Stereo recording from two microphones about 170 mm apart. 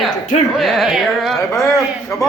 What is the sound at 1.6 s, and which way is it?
Speech, 20° left (ahead or behind).